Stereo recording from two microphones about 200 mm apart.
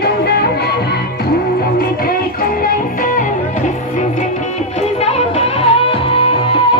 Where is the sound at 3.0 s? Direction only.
40° left (ahead or behind).